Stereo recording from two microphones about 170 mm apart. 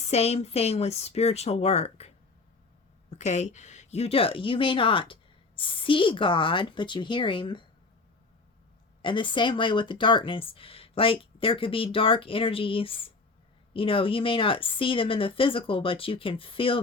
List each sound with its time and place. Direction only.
0.0 s speech: 40° left (ahead or behind)
9.0 s speech: 30° left (ahead or behind)